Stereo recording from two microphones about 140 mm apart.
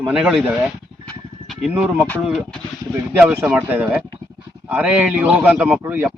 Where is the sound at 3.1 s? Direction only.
15° right (ahead or behind).